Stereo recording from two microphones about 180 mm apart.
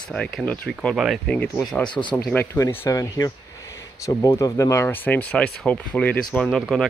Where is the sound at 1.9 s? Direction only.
25° left (ahead or behind).